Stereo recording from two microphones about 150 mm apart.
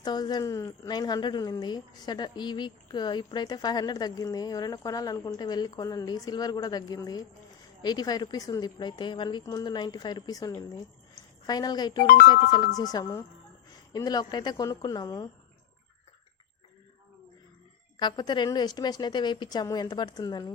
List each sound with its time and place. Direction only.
0.0 s a woman's voice: 25° left (ahead or behind)
12.0 s speech: 70° left (ahead or behind)
12.5 s a woman's voice: 25° left (ahead or behind)
17.9 s a woman's voice: 30° left (ahead or behind)